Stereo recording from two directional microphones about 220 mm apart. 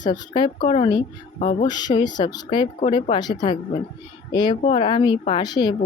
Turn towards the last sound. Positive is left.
turn(degrees=20)  # may be behind; listen again after turning